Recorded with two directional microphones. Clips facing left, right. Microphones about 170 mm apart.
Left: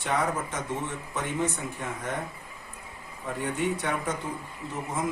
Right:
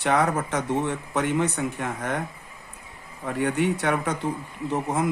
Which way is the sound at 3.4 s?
70° right (ahead or behind).